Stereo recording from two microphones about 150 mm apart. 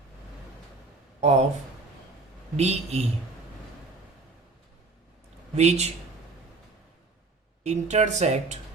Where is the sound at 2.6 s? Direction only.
45° right (ahead or behind).